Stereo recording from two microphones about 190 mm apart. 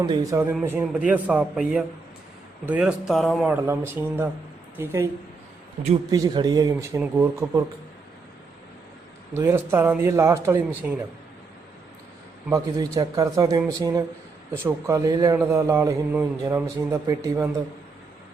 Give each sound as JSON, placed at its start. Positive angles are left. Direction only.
{"t": 0.0, "sound": "a man's voice", "side_deg": -20}
{"t": 3.5, "sound": "a man's voice", "side_deg": -10}
{"t": 6.1, "sound": "speech", "side_deg": -20}
{"t": 9.3, "sound": "a man's voice", "side_deg": -15}
{"t": 12.5, "sound": "a man's voice", "side_deg": -20}